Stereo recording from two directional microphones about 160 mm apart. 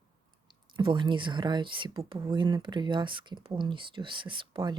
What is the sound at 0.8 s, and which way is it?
Speech, 30° right (ahead or behind).